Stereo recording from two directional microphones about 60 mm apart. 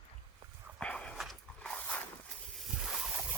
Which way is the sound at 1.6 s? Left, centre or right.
Centre.